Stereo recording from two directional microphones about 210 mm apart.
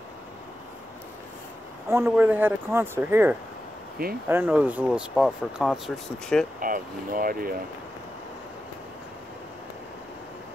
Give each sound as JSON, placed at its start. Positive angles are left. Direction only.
{"t": 1.9, "sound": "speech", "side_deg": -10}
{"t": 6.6, "sound": "speech", "side_deg": -40}